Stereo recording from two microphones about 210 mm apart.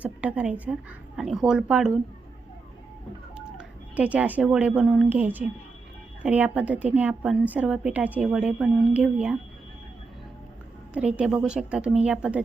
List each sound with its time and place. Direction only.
0.0 s a woman's voice: 5° right (ahead or behind)
3.3 s a woman's voice: 5° right (ahead or behind)
10.9 s a woman's voice: 5° right (ahead or behind)